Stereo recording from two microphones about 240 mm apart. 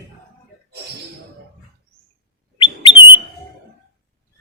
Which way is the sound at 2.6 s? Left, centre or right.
Left.